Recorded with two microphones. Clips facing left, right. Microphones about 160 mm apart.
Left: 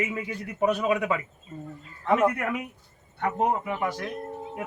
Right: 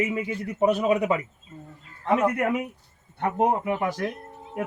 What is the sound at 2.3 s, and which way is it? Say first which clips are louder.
A man's voice: right 5 dB; 25° right (ahead or behind).